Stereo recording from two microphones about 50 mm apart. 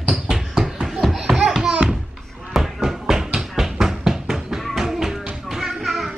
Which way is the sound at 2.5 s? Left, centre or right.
Centre.